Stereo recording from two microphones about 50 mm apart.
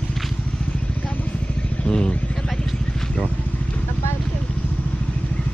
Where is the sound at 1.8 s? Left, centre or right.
Centre.